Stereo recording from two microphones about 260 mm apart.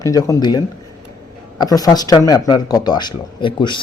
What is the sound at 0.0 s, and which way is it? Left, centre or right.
Speech, centre.